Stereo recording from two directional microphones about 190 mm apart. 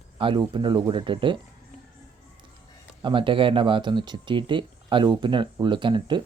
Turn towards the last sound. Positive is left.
turn(degrees=-25)  # may be behind; listen again after turning